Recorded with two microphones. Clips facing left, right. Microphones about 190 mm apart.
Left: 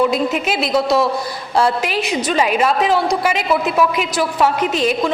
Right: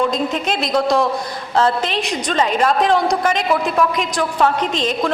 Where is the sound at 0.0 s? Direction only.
5° left (ahead or behind).